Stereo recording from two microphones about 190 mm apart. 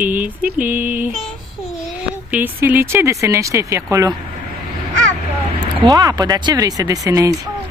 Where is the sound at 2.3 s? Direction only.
10° right (ahead or behind).